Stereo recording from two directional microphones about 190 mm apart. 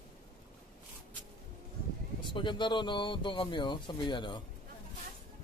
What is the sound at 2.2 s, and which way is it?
Speech, 25° left (ahead or behind).